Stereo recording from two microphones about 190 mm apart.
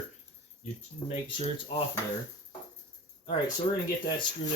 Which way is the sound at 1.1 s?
35° left (ahead or behind).